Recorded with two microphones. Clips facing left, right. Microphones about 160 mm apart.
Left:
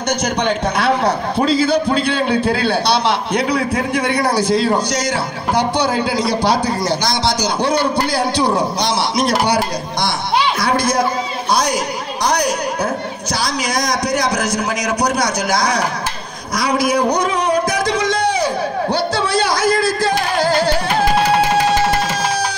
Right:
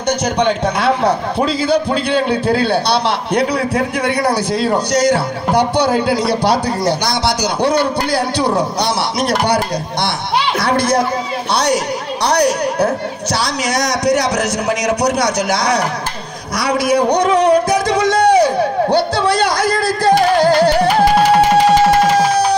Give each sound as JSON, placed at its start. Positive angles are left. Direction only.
{"t": 1.4, "sound": "a man's voice", "side_deg": -15}
{"t": 3.3, "sound": "a man's voice", "side_deg": -35}
{"t": 6.0, "sound": "a man's voice", "side_deg": -60}
{"t": 10.6, "sound": "a man's voice", "side_deg": -60}
{"t": 12.3, "sound": "a man's voice", "side_deg": -70}
{"t": 17.4, "sound": "a sound", "side_deg": -65}